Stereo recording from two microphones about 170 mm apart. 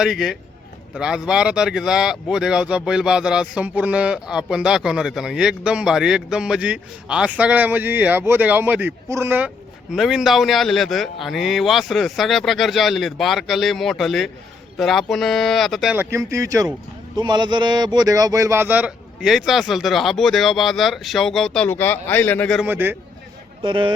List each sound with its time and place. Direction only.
0.0 s speech: 5° right (ahead or behind)
9.9 s speech: 5° right (ahead or behind)
16.1 s speech: 20° right (ahead or behind); by 22.6 s 5° left (ahead or behind)
22.6 s a man's voice: 10° right (ahead or behind)
23.6 s speech: 30° right (ahead or behind)